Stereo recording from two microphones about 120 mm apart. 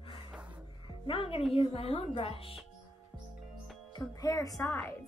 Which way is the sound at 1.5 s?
55° left (ahead or behind).